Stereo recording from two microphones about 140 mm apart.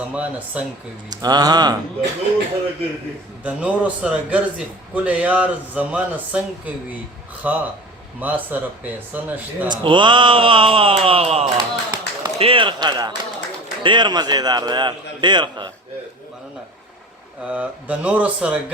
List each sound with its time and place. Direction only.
0.1 s a man's voice: 10° right (ahead or behind)
1.1 s speech: 30° right (ahead or behind)
3.4 s a man's voice: 10° right (ahead or behind)
9.6 s a man's voice: 35° right (ahead or behind)
11.5 s run: 30° right (ahead or behind)
12.4 s a man's voice: 40° right (ahead or behind)
17.4 s a man's voice: 10° right (ahead or behind)